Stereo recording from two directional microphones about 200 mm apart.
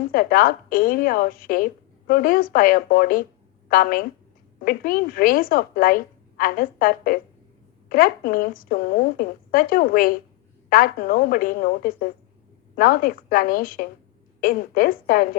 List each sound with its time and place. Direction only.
0.1 s a woman's voice: 45° left (ahead or behind)